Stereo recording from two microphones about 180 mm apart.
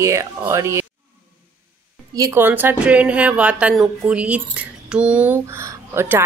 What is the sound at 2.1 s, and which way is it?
Speech, 15° right (ahead or behind).